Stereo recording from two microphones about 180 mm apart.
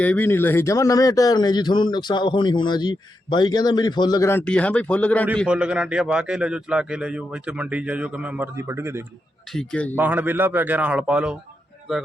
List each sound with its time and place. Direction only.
0.0 s speech: 10° left (ahead or behind)
5.5 s a man's voice: 5° right (ahead or behind)
9.5 s a man's voice: 5° left (ahead or behind)
9.9 s a man's voice: 10° right (ahead or behind)